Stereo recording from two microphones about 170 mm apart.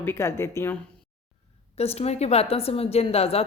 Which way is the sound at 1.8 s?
35° left (ahead or behind).